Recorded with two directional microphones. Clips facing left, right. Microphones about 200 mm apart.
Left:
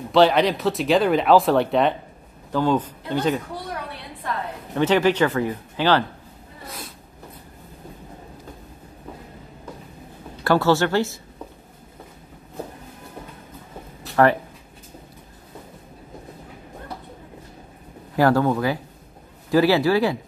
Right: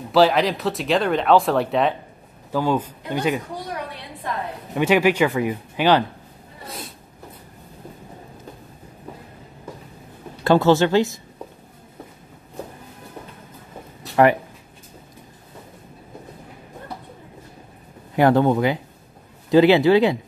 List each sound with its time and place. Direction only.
0.1 s speech: centre (ahead or behind)
4.7 s speech: 10° right (ahead or behind)
10.4 s speech: 20° right (ahead or behind)
18.1 s speech: 20° right (ahead or behind)